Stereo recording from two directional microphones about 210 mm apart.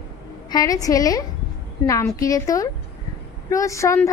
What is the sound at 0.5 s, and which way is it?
A woman's voice, 15° left (ahead or behind).